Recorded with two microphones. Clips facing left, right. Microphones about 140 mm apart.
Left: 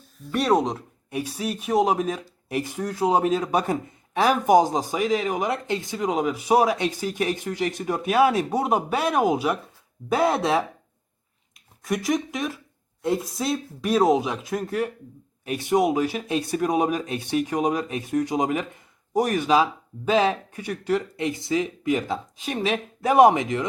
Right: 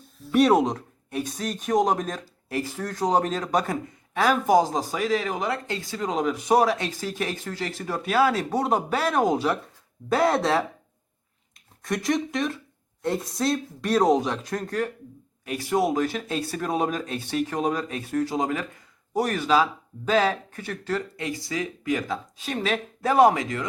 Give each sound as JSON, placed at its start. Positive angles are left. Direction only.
{"t": 0.0, "sound": "speech", "side_deg": 0}
{"t": 11.8, "sound": "speech", "side_deg": 5}
{"t": 15.4, "sound": "speech", "side_deg": 20}